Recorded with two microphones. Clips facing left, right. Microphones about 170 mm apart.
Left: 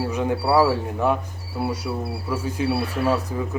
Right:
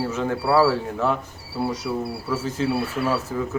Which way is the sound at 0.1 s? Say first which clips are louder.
Left 2 dB; 15° left (ahead or behind).